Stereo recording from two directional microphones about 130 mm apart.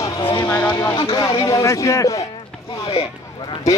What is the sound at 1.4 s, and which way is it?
Music, 25° left (ahead or behind).